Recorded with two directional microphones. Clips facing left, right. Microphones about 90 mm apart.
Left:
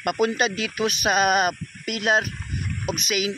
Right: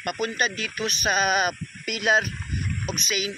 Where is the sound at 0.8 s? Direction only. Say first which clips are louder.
Left 5 dB; 10° left (ahead or behind).